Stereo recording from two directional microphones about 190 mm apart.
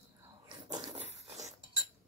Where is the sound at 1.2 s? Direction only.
35° right (ahead or behind).